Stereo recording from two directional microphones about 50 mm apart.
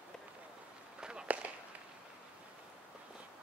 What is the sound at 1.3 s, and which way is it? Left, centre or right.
Firecracker, right.